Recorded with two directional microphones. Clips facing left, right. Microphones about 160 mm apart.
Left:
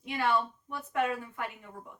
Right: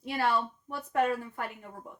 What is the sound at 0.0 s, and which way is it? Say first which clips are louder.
A woman's voice: even; 40° right (ahead or behind).